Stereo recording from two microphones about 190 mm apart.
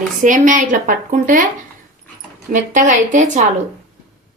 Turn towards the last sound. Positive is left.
turn(degrees=-40)  # may be behind; listen again after turning